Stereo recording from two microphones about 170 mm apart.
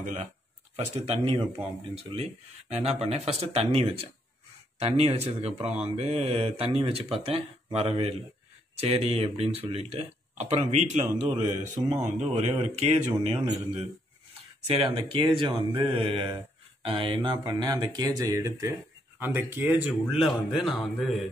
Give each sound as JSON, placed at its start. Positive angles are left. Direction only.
{"t": 0.0, "sound": "speech", "side_deg": -45}
{"t": 2.7, "sound": "speech", "side_deg": -35}
{"t": 14.7, "sound": "speech", "side_deg": -30}